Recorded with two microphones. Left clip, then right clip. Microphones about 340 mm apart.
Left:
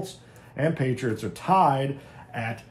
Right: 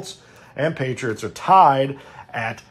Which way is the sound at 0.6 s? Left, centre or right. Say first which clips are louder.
Right 4 dB; right.